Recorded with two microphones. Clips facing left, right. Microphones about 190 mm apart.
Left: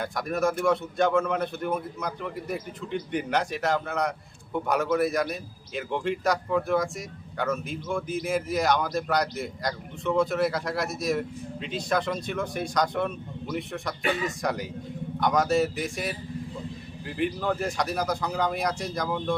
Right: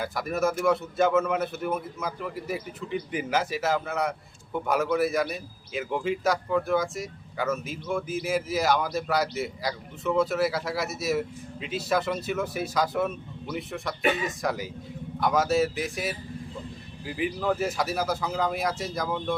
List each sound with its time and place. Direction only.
0.0 s a man's voice: 5° right (ahead or behind)